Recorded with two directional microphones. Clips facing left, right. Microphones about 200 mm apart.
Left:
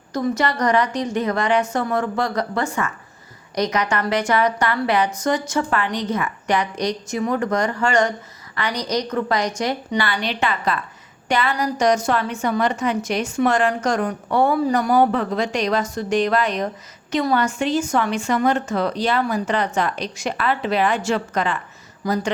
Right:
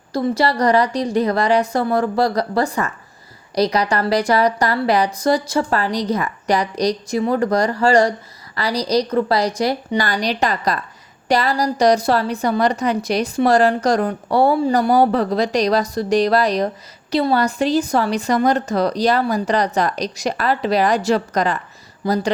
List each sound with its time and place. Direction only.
0.1 s a woman's voice: 30° right (ahead or behind)